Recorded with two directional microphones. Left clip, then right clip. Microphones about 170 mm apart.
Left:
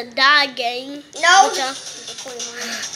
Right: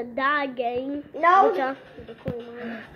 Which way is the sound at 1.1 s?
20° right (ahead or behind).